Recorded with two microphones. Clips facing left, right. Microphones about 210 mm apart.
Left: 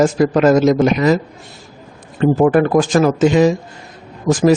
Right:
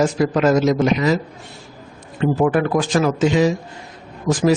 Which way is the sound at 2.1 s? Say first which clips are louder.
Left 5 dB; 45° left (ahead or behind).